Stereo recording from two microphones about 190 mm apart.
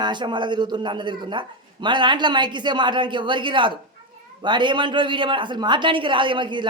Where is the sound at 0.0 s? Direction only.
25° right (ahead or behind).